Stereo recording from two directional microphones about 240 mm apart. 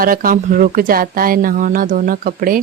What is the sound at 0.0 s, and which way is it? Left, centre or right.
Speech, right.